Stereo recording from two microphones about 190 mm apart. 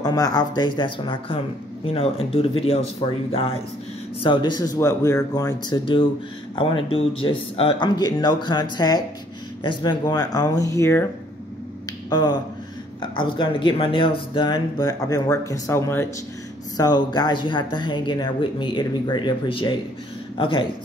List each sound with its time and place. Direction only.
0.0 s speech: 20° left (ahead or behind)
12.1 s speech: 20° left (ahead or behind)